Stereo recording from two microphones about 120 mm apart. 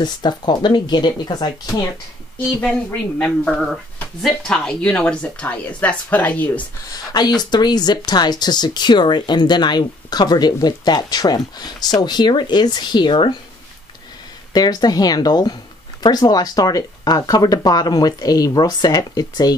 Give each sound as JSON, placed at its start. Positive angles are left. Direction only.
{"t": 0.0, "sound": "speech", "side_deg": 35}
{"t": 2.3, "sound": "speech", "side_deg": 10}
{"t": 7.1, "sound": "speech", "side_deg": 35}
{"t": 14.5, "sound": "speech", "side_deg": 35}